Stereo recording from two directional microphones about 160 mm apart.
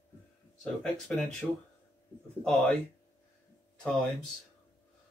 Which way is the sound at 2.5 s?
Centre (ahead or behind).